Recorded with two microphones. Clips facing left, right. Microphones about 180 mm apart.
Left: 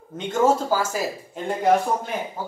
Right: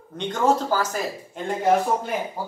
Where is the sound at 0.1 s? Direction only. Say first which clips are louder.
Left 2 dB; 5° left (ahead or behind).